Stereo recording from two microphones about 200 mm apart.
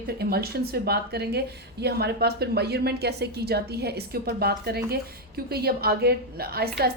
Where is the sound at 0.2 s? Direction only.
50° right (ahead or behind).